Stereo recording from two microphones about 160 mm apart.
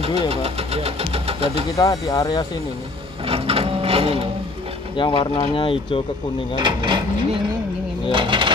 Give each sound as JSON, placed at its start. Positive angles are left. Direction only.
{"t": 0.0, "sound": "vehicle", "side_deg": -40}
{"t": 1.8, "sound": "speech", "side_deg": 20}
{"t": 3.3, "sound": "printer", "side_deg": -35}
{"t": 4.9, "sound": "speech", "side_deg": 30}
{"t": 6.5, "sound": "speech", "side_deg": -30}
{"t": 8.1, "sound": "a sound", "side_deg": -30}